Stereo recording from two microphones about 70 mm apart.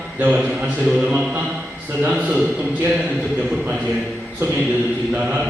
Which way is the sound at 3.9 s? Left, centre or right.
Right.